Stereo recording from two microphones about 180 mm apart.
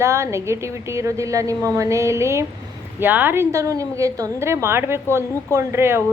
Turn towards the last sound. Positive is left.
turn(degrees=-15)  # may be behind; listen again after turning